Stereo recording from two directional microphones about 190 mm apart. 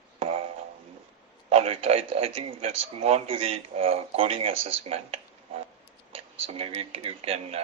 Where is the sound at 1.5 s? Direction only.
30° right (ahead or behind).